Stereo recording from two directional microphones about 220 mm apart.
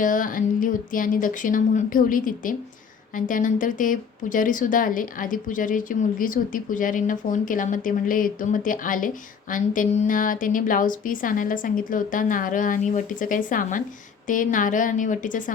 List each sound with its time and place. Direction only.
0.0 s speech: 40° left (ahead or behind)